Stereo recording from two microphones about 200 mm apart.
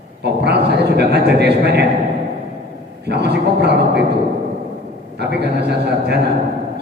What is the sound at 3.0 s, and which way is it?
Speech, 55° right (ahead or behind).